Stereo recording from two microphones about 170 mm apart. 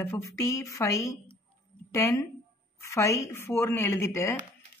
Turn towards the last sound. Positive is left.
turn(degrees=15)  # may be behind; listen again after turning